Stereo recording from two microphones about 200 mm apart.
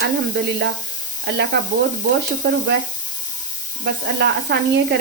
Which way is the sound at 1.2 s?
55° right (ahead or behind).